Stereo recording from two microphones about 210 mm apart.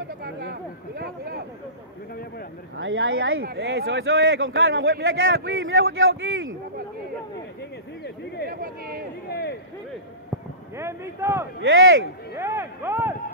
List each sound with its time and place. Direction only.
0.2 s speech: 50° right (ahead or behind)
2.8 s a man's voice: 70° right (ahead or behind)
3.4 s a man's voice: 50° right (ahead or behind); by 6.5 s 70° right (ahead or behind)
8.5 s speech: 45° right (ahead or behind)
9.3 s a sound: 50° left (ahead or behind)
10.8 s speech: 10° right (ahead or behind)
11.6 s a man's voice: 70° right (ahead or behind)
12.4 s speech: 10° right (ahead or behind)